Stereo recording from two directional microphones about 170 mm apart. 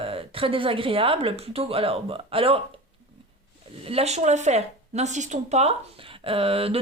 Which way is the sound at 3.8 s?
35° right (ahead or behind).